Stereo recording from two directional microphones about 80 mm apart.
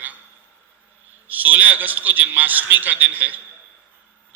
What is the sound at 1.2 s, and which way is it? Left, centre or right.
A man's voice, right.